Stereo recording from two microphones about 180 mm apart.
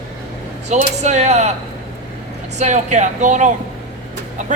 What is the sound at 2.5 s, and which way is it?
Speech, 40° right (ahead or behind).